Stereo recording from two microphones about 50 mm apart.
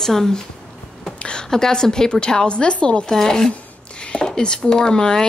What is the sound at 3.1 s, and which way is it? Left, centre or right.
Speech, centre.